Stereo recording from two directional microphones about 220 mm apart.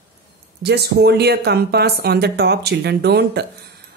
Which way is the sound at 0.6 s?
45° right (ahead or behind).